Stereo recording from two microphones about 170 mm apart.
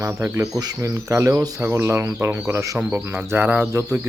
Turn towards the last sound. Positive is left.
turn(degrees=-15)  # may be behind; listen again after turning